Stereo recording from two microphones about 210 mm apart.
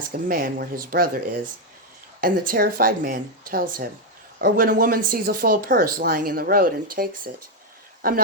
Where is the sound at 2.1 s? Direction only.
40° right (ahead or behind).